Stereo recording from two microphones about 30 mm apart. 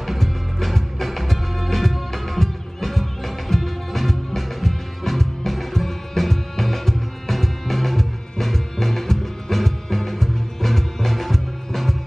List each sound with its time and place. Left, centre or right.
0.0 s music: centre